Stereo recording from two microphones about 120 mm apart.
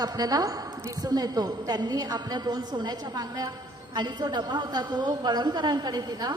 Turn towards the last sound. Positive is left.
turn(degrees=-35)  # may be behind; listen again after turning